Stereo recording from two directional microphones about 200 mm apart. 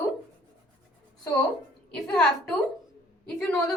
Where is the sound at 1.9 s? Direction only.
Centre (ahead or behind).